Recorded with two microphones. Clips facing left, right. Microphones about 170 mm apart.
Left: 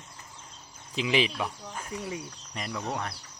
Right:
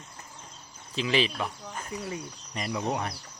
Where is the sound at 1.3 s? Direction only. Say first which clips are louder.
Even; centre (ahead or behind).